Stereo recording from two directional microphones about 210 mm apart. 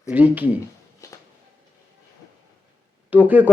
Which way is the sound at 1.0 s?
15° left (ahead or behind).